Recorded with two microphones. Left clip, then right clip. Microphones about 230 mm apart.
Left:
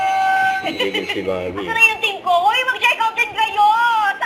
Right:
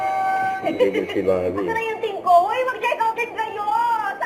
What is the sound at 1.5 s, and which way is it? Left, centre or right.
Speech, left.